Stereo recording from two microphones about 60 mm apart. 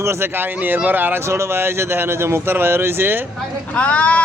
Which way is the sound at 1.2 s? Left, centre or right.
Right.